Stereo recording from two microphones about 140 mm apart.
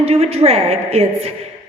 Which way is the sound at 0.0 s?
45° right (ahead or behind).